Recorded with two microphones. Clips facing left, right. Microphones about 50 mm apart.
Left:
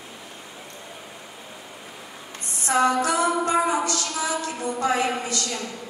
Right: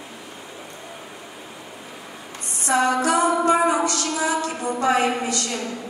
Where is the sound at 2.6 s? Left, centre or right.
Right.